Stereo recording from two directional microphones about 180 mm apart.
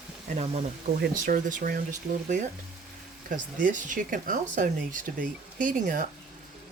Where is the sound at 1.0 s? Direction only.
50° right (ahead or behind).